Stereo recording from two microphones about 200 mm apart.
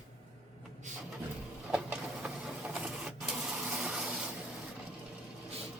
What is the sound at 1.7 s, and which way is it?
Printer, 5° right (ahead or behind).